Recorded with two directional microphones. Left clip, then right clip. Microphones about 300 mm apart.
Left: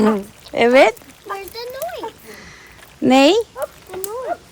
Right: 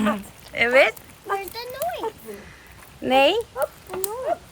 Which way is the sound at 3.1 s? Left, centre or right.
Centre.